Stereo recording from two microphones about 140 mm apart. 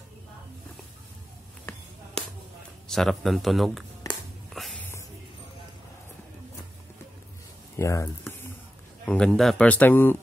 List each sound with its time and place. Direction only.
2.9 s speech: centre (ahead or behind)
4.6 s music: centre (ahead or behind)
7.7 s speech: 20° left (ahead or behind)
9.0 s speech: 5° left (ahead or behind)